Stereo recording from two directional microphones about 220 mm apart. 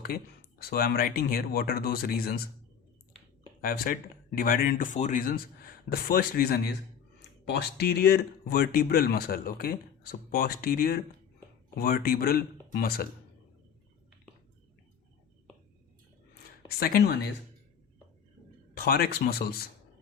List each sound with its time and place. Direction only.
0.6 s speech: 45° left (ahead or behind)
3.6 s speech: 40° left (ahead or behind)
16.8 s speech: 45° left (ahead or behind)
18.7 s speech: 45° left (ahead or behind)